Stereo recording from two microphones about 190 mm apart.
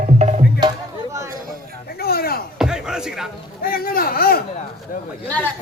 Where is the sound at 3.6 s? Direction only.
50° left (ahead or behind).